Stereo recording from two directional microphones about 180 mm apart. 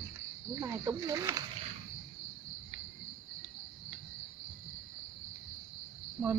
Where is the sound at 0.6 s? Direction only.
15° right (ahead or behind).